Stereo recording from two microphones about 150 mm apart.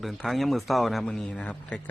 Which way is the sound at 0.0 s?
Centre (ahead or behind).